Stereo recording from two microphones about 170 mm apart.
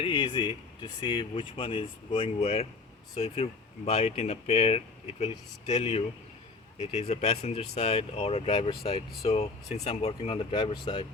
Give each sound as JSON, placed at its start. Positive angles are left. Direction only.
{"t": 0.0, "sound": "speech", "side_deg": 30}